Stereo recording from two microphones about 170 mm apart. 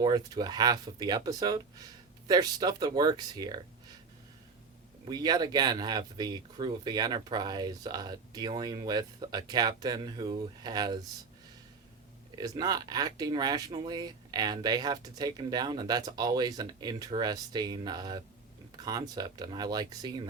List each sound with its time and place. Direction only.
0.0 s speech: 25° right (ahead or behind)
5.0 s speech: 25° right (ahead or behind)
12.4 s speech: 25° right (ahead or behind)